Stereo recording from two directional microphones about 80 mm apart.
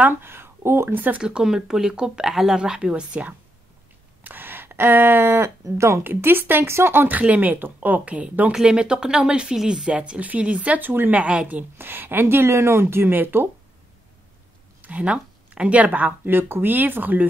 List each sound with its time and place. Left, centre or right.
0.0 s speech: right
1.2 s speech: centre; by 13.5 s right
14.8 s speech: centre